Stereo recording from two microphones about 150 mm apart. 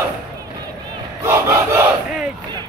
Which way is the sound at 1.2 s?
15° right (ahead or behind).